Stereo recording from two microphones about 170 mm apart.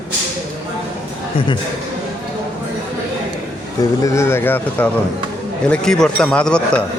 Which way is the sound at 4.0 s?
15° left (ahead or behind).